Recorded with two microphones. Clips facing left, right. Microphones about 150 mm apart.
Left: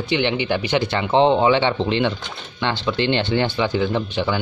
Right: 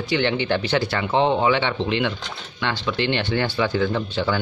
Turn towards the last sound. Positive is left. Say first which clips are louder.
# left 1 dB
turn(degrees=15)  # may be behind; listen again after turning